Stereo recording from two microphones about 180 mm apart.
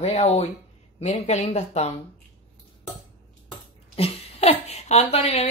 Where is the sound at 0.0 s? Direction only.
35° left (ahead or behind).